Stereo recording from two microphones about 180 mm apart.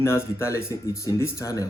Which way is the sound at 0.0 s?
15° left (ahead or behind).